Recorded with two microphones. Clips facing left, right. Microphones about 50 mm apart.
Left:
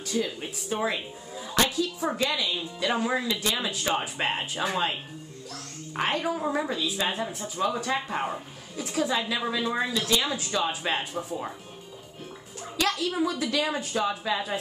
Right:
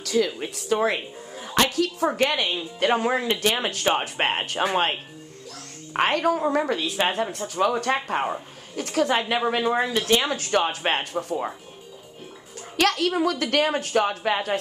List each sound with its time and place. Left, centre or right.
0.0 s speech: right
5.9 s speech: right
12.7 s speech: right